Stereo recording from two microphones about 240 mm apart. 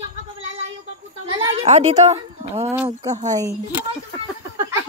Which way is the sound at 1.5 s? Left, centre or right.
Right.